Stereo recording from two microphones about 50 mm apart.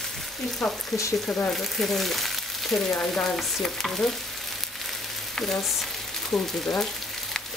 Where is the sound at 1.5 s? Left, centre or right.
Centre.